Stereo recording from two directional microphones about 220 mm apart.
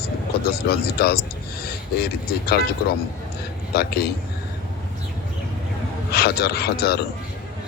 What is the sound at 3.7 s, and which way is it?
Speech, 45° left (ahead or behind).